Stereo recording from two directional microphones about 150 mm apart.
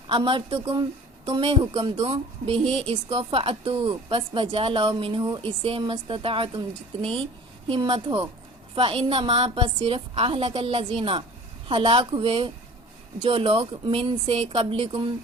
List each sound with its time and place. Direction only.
0.1 s a woman's voice: 35° right (ahead or behind)
1.4 s a woman's voice: 40° right (ahead or behind)